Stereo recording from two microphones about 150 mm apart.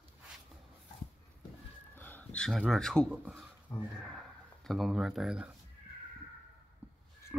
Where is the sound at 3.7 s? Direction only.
25° left (ahead or behind).